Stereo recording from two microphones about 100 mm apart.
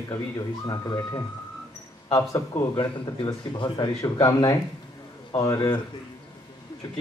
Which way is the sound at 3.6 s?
55° left (ahead or behind).